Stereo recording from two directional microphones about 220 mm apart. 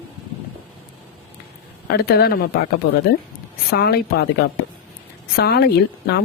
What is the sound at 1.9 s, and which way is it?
Speech, 45° left (ahead or behind).